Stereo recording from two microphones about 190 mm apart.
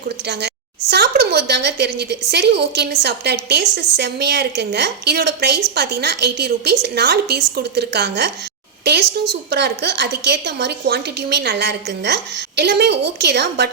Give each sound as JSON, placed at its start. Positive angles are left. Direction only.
{"t": 0.3, "sound": "a woman's voice", "side_deg": -60}